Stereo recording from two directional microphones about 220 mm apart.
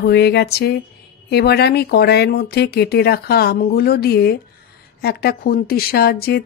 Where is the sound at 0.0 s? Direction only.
45° left (ahead or behind).